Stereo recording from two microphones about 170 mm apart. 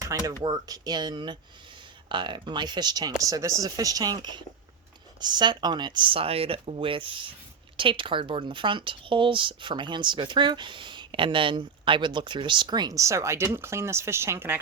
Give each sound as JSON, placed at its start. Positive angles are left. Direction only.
{"t": 0.0, "sound": "speech", "side_deg": -20}